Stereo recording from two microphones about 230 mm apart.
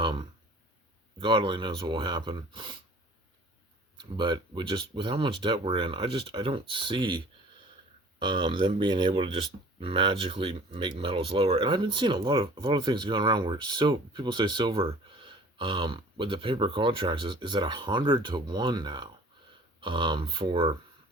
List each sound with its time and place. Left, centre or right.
0.0 s a sound: right
1.2 s speech: right
3.9 s speech: right
8.2 s speech: right